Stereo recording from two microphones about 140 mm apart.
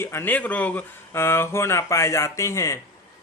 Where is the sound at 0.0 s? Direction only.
15° left (ahead or behind).